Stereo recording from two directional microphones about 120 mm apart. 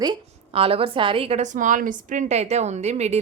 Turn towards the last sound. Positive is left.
turn(degrees=-70)  # may be behind; listen again after turning